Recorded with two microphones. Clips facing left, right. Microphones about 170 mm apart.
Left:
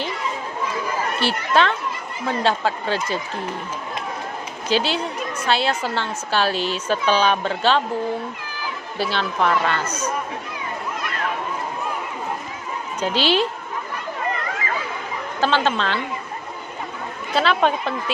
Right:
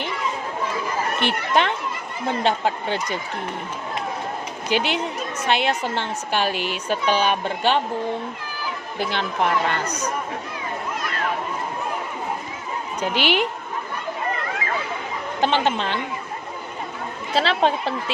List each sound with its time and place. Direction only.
1.2 s a woman's voice: 20° right (ahead or behind)
4.7 s a woman's voice: 20° right (ahead or behind)
9.0 s a woman's voice: 20° right (ahead or behind)
13.0 s a woman's voice: 15° right (ahead or behind)
15.4 s a woman's voice: 20° right (ahead or behind)
17.3 s speech: 30° right (ahead or behind)